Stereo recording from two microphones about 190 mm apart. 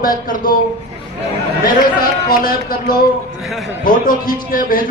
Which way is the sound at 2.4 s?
50° left (ahead or behind).